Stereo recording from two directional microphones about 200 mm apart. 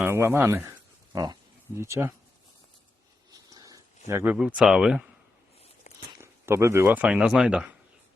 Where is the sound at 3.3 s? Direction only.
20° right (ahead or behind).